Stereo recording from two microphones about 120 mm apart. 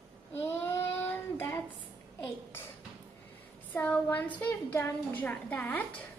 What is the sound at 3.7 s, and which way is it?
A woman's voice, 10° left (ahead or behind).